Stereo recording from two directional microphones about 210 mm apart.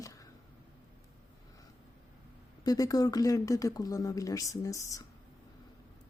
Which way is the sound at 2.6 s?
15° left (ahead or behind).